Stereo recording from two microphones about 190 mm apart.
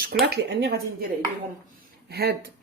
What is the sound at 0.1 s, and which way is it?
Speech, 55° right (ahead or behind).